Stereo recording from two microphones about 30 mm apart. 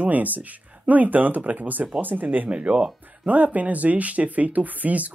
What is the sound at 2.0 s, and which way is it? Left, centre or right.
Speech, right.